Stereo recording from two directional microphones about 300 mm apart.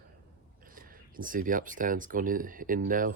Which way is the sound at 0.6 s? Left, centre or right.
Right.